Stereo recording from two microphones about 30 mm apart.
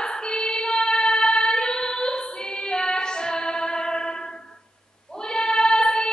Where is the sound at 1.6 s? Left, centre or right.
Left.